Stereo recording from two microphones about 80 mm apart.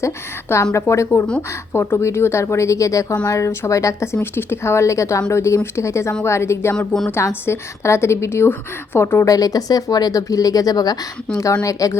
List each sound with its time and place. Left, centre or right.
0.5 s a woman's voice: left
6.7 s speech: centre
7.1 s a woman's voice: left
9.2 s speech: left
11.3 s a woman's voice: left